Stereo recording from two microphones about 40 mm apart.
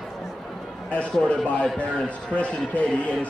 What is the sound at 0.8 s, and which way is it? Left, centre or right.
A man's voice, left.